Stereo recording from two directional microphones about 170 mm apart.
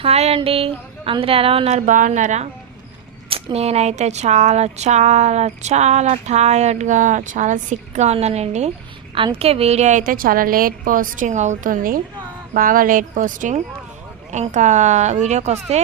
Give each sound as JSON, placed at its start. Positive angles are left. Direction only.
{"t": 0.0, "sound": "a woman's voice", "side_deg": -35}